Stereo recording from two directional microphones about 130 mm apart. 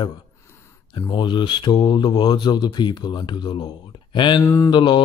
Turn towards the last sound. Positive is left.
turn(degrees=35)  # may be behind; listen again after turning